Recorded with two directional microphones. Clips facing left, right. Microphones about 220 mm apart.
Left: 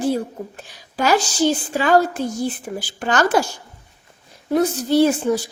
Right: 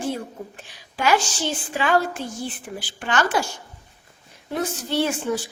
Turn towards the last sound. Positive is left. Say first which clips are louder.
# left 7 dB
turn(degrees=40)  # may be behind; listen again after turning